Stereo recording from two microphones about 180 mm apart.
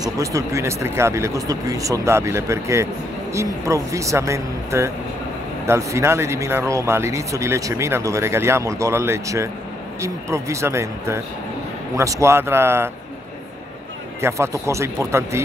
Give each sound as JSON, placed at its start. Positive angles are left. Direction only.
{"t": 0.0, "sound": "speech", "side_deg": -20}
{"t": 14.2, "sound": "speech", "side_deg": -15}